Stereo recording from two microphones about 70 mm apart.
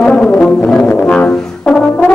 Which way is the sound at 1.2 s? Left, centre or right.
Centre.